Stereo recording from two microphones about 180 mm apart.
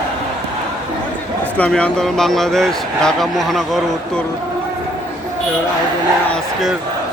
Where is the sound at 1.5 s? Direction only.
5° left (ahead or behind).